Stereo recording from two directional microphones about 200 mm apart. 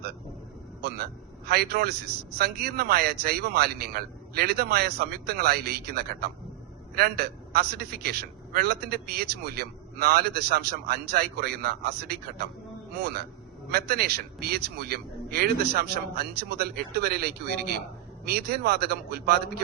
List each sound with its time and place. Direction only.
0.8 s a man's voice: 50° right (ahead or behind)